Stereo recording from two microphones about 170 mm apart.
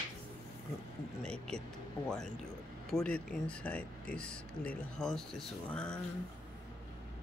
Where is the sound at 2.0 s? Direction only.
5° left (ahead or behind).